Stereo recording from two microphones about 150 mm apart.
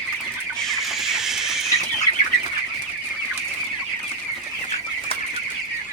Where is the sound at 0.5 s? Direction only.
Centre (ahead or behind).